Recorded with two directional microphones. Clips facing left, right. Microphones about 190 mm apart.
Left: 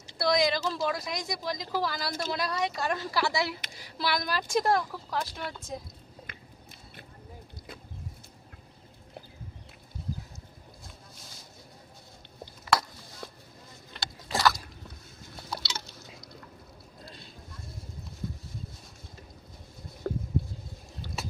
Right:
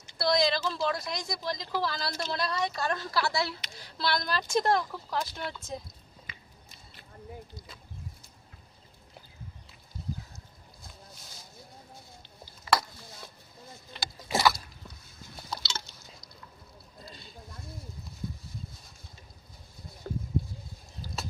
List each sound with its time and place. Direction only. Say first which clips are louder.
0.2 s speech: left 1 dB; 15° left (ahead or behind); by 5.5 s centre (ahead or behind)
6.2 s biting: left 3 dB; 55° left (ahead or behind)
14.3 s boat: right 1 dB; 15° right (ahead or behind)
15.4 s drip: left 1 dB; 5° left (ahead or behind)
17.1 s a sound: right 1 dB; centre (ahead or behind)
20.1 s a sound: left 4 dB; 50° left (ahead or behind)